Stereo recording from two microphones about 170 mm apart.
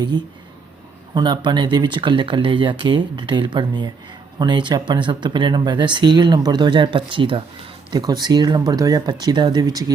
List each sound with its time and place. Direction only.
1.1 s speech: 25° right (ahead or behind)